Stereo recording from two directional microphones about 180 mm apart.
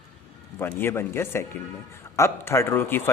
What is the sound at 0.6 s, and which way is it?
Speech, 15° left (ahead or behind).